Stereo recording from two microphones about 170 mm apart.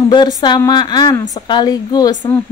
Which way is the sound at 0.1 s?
25° left (ahead or behind).